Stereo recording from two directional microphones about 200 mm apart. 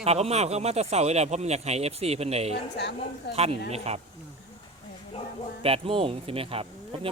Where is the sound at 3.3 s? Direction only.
55° left (ahead or behind).